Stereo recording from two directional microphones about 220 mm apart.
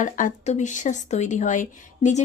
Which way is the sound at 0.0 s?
35° left (ahead or behind).